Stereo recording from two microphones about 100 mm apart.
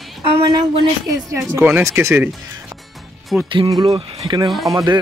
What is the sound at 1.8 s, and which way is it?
Speech, 30° right (ahead or behind).